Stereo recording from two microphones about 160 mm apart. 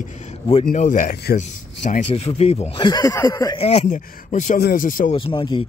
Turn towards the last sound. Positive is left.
turn(degrees=30)  # may be behind; listen again after turning